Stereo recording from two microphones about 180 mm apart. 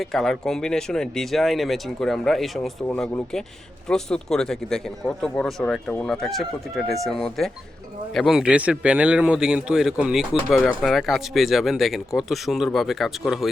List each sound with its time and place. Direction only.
0.0 s speech: centre (ahead or behind)